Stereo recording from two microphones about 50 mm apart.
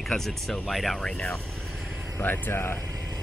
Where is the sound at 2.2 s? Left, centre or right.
Left.